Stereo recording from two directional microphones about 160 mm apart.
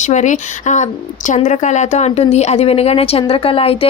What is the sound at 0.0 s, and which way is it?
Speech, 50° left (ahead or behind).